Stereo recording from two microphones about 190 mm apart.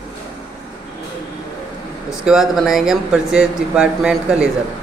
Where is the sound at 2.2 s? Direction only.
Centre (ahead or behind).